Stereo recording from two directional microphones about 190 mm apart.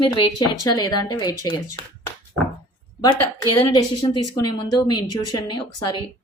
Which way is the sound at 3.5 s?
25° left (ahead or behind).